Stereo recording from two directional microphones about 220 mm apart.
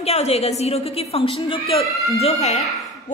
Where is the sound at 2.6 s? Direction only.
Centre (ahead or behind).